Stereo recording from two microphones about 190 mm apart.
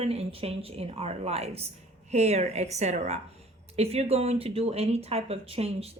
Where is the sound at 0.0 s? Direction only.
30° right (ahead or behind).